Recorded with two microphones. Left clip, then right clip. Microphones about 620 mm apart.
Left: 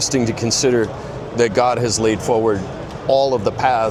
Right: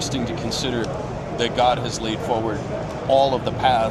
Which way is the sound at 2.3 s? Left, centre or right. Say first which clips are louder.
Left 6 dB; left.